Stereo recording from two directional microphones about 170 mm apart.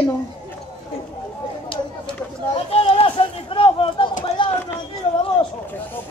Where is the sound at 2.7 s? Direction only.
35° left (ahead or behind).